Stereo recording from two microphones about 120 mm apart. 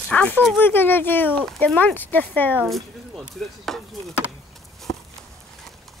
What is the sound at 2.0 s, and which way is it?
Speech, 15° left (ahead or behind).